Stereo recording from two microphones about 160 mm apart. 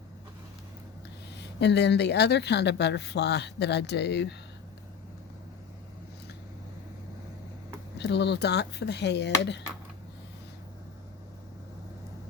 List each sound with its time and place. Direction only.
1.4 s speech: 90° left
7.9 s speech: 90° left